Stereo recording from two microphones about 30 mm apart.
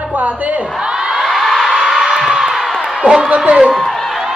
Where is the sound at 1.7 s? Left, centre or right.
Centre.